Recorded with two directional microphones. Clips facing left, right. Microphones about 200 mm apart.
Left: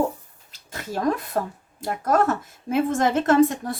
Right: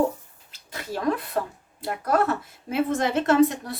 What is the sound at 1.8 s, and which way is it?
A woman's voice, 45° left (ahead or behind).